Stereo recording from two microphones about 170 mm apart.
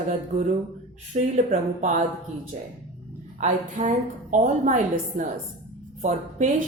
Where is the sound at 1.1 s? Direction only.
45° right (ahead or behind).